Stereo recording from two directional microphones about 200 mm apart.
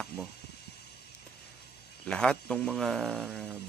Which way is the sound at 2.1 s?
5° left (ahead or behind).